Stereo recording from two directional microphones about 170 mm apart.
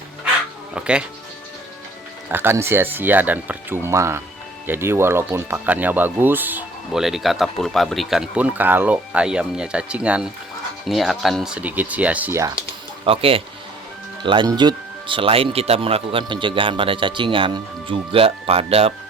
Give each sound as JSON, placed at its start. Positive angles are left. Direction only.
{"t": 0.7, "sound": "speech", "side_deg": -5}
{"t": 2.3, "sound": "speech", "side_deg": -15}
{"t": 13.1, "sound": "speech", "side_deg": -35}